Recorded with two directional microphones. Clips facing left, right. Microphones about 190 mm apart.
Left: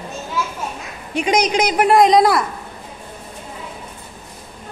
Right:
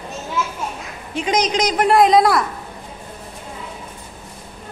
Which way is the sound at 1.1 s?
15° left (ahead or behind).